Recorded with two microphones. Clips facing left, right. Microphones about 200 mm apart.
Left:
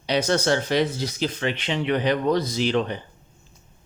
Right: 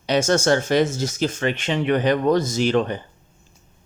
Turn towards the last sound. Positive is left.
turn(degrees=-45)  # may be behind; listen again after turning